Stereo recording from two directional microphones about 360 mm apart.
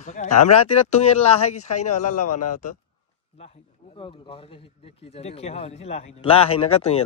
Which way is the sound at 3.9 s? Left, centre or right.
Centre.